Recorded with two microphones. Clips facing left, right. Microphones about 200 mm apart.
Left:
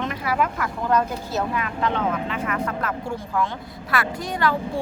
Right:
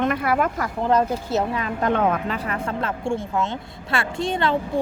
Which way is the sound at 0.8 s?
30° right (ahead or behind).